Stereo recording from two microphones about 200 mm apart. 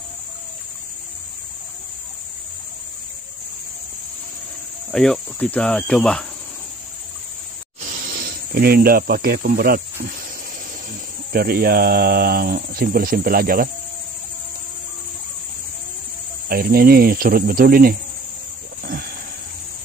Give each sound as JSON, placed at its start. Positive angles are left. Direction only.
{"t": 4.9, "sound": "cricket", "side_deg": 5}
{"t": 8.1, "sound": "speech", "side_deg": -50}
{"t": 10.9, "sound": "speech", "side_deg": -50}
{"t": 16.4, "sound": "speech", "side_deg": -50}